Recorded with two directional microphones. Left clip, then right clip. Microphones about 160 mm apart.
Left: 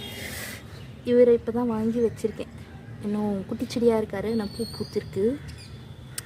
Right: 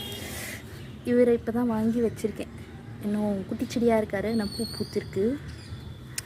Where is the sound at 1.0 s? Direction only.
Centre (ahead or behind).